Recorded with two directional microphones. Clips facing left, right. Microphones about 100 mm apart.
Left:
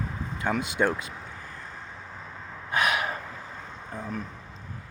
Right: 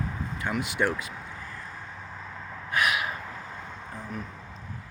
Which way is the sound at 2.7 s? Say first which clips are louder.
Left 1 dB; 30° left (ahead or behind).